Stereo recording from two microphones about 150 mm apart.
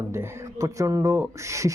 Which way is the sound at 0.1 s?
20° right (ahead or behind).